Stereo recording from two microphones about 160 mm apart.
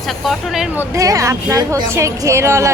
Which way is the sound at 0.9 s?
20° right (ahead or behind).